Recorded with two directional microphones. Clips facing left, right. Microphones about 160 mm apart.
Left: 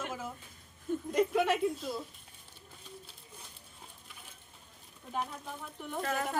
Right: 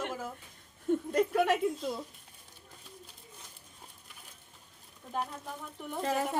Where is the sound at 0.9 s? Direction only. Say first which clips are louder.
Right 5 dB; 75° right (ahead or behind).